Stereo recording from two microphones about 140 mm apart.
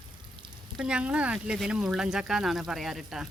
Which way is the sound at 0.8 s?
5° right (ahead or behind).